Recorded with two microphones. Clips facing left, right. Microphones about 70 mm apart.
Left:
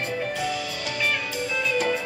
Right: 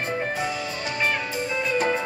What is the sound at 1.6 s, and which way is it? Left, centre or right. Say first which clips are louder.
Music: right 1 dB; right.